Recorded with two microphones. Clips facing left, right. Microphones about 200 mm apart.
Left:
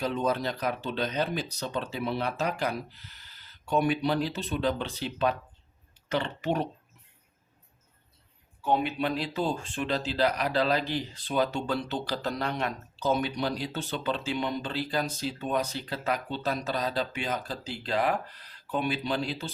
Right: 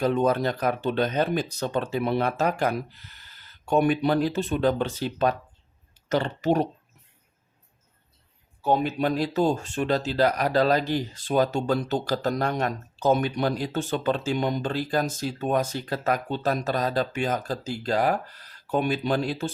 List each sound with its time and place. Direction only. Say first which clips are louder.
0.0 s speech: right 6 dB; 50° right (ahead or behind)
8.6 s speech: right 4 dB; 40° right (ahead or behind)